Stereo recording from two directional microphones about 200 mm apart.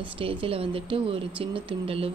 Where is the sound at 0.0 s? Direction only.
25° right (ahead or behind).